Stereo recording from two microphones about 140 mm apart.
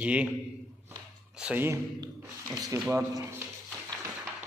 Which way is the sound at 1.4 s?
15° right (ahead or behind).